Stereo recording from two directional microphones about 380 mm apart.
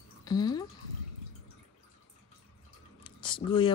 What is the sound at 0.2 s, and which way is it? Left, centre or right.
Speech, centre.